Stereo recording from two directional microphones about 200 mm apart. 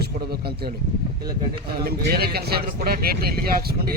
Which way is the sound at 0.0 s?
50° right (ahead or behind).